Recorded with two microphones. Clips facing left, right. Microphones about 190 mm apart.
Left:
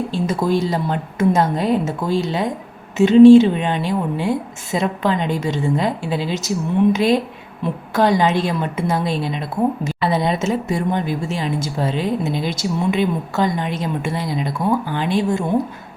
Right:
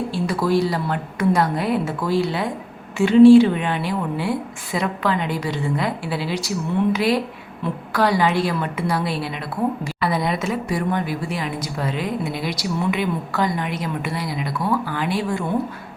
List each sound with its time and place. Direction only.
0.3 s a woman's voice: 25° left (ahead or behind)